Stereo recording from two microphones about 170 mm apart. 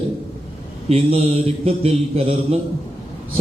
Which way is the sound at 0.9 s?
35° right (ahead or behind).